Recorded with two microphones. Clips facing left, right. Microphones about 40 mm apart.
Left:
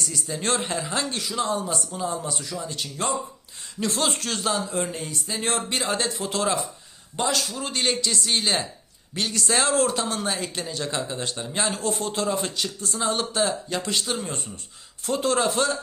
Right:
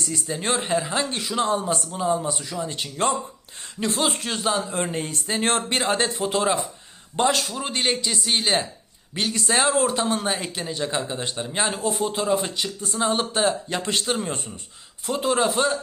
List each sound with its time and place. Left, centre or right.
0.1 s speech: centre
1.2 s speech: right
2.0 s a man's voice: right
2.6 s speech: right
3.8 s a man's voice: centre
4.7 s speech: right
7.2 s speech: right
7.5 s a man's voice: right
12.8 s a man's voice: right
15.0 s speech: centre